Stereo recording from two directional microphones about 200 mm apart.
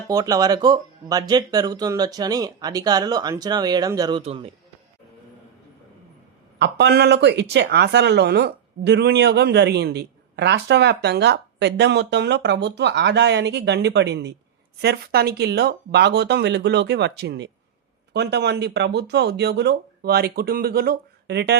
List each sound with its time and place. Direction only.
0.1 s speech: 15° right (ahead or behind)
6.6 s speech: 60° right (ahead or behind)